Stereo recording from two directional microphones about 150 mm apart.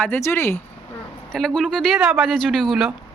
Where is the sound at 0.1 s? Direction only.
15° left (ahead or behind).